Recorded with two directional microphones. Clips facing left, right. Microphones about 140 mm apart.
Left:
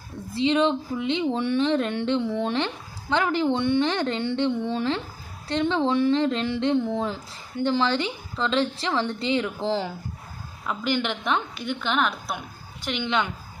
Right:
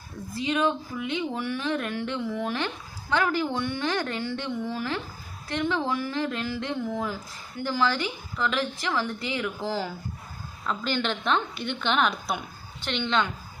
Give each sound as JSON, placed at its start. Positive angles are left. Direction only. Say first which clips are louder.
{"t": 0.3, "sound": "a woman's voice", "louder": "left 4 dB", "side_deg": 25}